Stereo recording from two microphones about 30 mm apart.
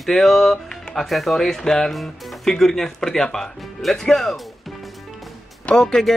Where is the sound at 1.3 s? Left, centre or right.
Centre.